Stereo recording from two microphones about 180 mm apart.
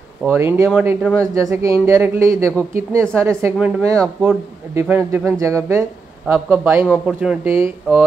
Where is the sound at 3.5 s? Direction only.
Centre (ahead or behind).